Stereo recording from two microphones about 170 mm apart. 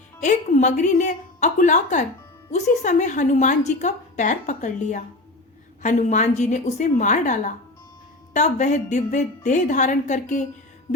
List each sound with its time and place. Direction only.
0.2 s a woman's voice: 45° left (ahead or behind)